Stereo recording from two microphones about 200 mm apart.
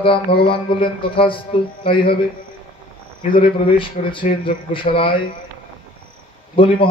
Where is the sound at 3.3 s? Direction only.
25° left (ahead or behind).